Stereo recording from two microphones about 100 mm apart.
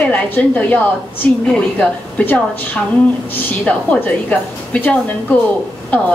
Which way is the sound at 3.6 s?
10° left (ahead or behind).